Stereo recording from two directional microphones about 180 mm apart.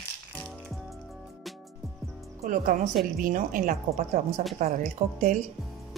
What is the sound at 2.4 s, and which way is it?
A woman's voice, 50° right (ahead or behind).